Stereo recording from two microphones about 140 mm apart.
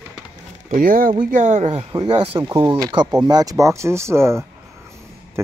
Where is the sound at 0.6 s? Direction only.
75° right (ahead or behind).